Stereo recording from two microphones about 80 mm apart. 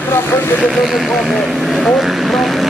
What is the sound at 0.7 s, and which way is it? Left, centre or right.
Speech, centre.